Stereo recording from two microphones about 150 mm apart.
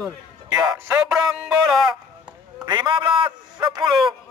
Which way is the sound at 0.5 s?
15° right (ahead or behind).